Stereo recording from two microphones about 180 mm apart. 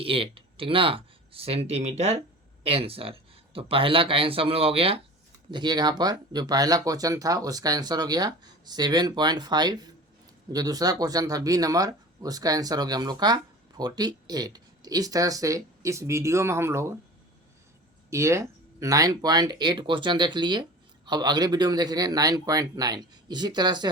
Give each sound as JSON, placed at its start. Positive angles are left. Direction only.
{"t": 0.0, "sound": "speech", "side_deg": -30}
{"t": 18.1, "sound": "speech", "side_deg": -15}